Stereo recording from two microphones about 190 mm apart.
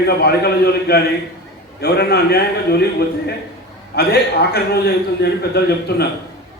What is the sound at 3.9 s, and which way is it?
A man's voice, 60° left (ahead or behind).